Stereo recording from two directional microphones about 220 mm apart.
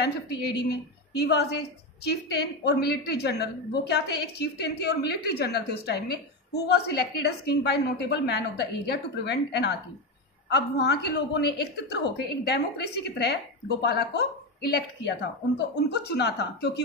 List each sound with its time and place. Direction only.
0.0 s a woman's voice: 50° left (ahead or behind)